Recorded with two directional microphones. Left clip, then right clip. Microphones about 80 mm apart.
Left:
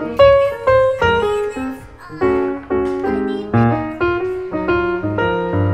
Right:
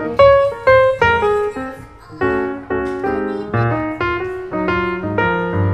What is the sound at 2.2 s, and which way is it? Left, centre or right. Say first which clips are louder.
Music: left 1 dB; left.